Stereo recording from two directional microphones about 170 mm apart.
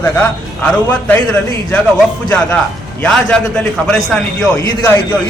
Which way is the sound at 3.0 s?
5° left (ahead or behind).